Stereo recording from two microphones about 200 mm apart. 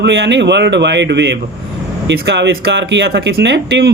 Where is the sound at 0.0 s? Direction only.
60° right (ahead or behind).